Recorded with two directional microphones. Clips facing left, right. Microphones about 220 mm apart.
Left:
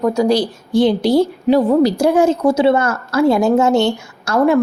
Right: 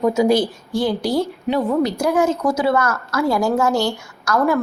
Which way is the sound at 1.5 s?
35° left (ahead or behind).